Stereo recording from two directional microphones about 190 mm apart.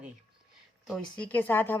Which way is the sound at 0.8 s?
5° left (ahead or behind).